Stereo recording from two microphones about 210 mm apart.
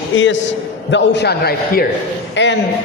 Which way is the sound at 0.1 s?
65° left (ahead or behind).